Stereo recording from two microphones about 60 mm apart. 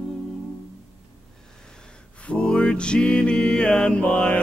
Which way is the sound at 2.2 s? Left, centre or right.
Centre.